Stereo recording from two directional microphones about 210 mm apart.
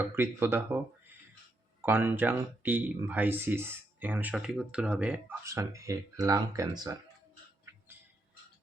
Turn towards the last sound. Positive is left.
turn(degrees=-15)  # may be behind; listen again after turning